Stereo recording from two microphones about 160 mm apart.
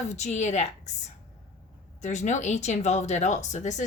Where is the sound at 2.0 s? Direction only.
45° left (ahead or behind).